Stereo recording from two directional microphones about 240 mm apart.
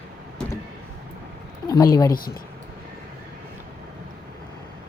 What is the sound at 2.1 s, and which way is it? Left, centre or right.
Speech, left.